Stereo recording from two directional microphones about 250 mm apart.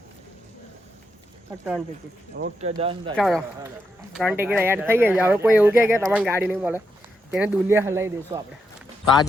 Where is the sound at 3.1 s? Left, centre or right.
Centre.